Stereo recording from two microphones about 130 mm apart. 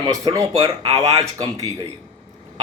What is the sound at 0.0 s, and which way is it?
Speech, 30° right (ahead or behind).